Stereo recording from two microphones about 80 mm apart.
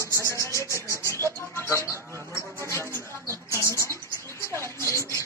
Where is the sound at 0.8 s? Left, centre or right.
Right.